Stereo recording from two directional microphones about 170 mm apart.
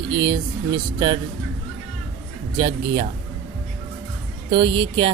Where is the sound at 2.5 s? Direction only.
30° right (ahead or behind).